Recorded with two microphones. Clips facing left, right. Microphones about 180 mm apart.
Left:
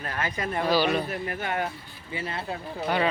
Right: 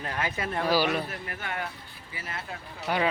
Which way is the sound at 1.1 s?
25° left (ahead or behind).